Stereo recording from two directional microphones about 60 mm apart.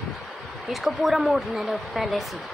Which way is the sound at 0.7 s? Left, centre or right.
Centre.